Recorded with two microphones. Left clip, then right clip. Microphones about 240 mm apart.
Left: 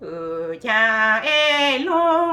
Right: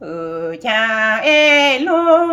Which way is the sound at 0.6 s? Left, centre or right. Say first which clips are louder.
Right 1 dB; centre.